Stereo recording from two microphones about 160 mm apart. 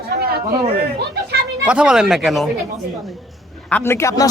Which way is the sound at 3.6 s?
10° left (ahead or behind).